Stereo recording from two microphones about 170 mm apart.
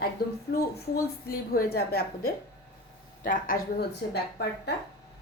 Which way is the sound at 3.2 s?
55° left (ahead or behind).